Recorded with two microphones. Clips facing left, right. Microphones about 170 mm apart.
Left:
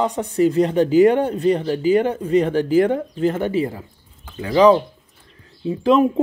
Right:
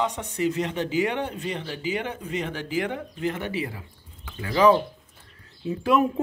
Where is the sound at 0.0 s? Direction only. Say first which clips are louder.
Left 8 dB; 35° left (ahead or behind).